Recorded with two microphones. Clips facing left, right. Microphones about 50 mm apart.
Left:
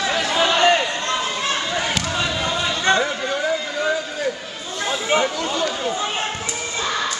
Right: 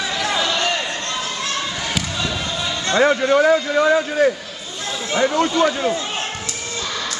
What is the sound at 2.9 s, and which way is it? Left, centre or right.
A man's voice, right.